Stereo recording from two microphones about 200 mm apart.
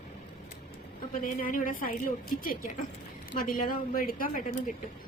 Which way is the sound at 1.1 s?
45° left (ahead or behind).